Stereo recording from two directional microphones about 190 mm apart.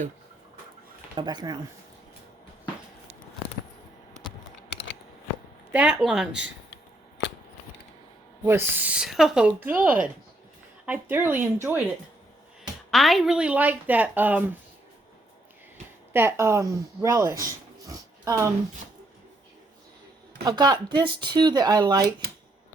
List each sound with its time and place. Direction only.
1.1 s speech: 25° right (ahead or behind)
5.7 s speech: 5° right (ahead or behind)
7.2 s scissors: 70° left (ahead or behind)
8.4 s speech: 10° right (ahead or behind)
12.9 s speech: centre (ahead or behind)
16.1 s speech: 15° right (ahead or behind)
20.4 s speech: 20° right (ahead or behind)